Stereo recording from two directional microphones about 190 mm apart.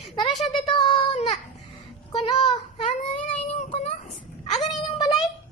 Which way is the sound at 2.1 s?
30° left (ahead or behind).